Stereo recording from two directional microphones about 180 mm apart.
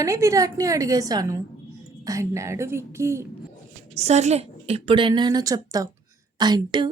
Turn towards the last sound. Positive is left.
turn(degrees=-25)  # may be behind; listen again after turning